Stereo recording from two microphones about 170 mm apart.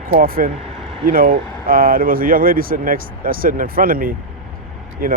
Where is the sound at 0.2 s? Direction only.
55° right (ahead or behind).